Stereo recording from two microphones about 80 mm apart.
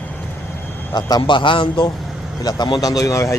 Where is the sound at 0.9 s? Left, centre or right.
Left.